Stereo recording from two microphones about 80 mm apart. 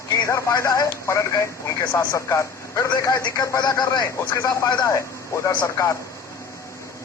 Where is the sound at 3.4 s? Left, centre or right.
Left.